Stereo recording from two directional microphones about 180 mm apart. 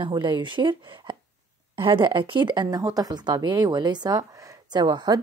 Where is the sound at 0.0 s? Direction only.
25° right (ahead or behind).